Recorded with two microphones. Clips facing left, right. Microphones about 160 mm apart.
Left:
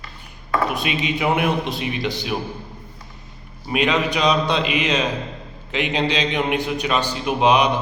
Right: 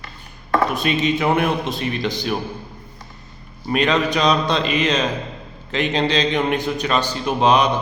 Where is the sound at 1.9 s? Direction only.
45° right (ahead or behind).